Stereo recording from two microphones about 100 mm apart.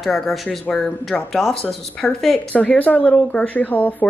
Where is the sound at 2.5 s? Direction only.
15° left (ahead or behind).